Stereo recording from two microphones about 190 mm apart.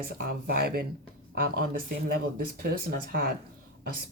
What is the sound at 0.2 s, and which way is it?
Speech, 50° right (ahead or behind).